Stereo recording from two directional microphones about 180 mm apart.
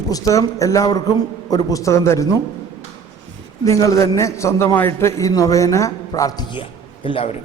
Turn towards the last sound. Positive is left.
turn(degrees=30)  # may be behind; listen again after turning